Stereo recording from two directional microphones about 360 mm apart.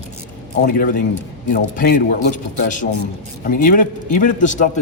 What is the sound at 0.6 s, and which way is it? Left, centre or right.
A man's voice, left.